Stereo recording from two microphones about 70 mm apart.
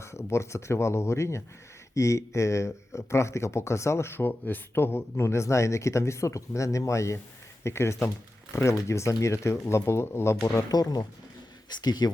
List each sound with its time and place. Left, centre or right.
0.0 s speech: left
10.7 s speech: left
11.7 s speech: left